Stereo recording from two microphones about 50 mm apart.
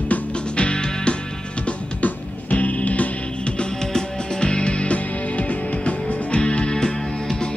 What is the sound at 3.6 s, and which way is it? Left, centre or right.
Music, centre.